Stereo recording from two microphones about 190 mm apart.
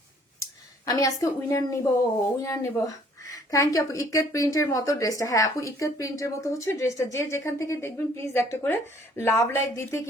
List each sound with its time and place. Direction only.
0.9 s a woman's voice: 20° left (ahead or behind)